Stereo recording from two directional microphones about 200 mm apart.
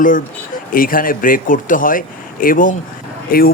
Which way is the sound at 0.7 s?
45° left (ahead or behind).